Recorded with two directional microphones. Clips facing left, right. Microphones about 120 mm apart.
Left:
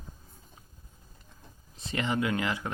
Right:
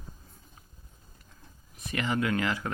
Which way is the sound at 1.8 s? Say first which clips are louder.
Even; 25° left (ahead or behind).